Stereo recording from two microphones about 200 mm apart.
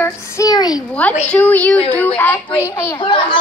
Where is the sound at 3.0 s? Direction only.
25° left (ahead or behind).